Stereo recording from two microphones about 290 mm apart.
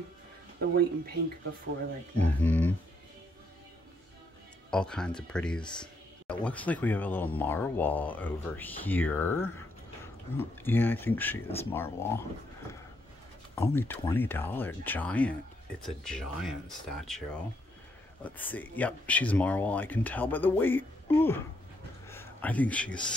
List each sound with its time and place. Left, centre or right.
0.6 s speech: right
2.4 s speech: centre
4.6 s speech: centre
13.6 s speech: centre
22.0 s a sound: centre